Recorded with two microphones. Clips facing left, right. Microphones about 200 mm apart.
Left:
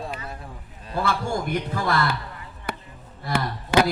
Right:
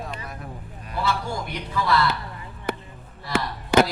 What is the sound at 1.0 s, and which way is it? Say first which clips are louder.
A man's voice: left 2 dB; 50° left (ahead or behind).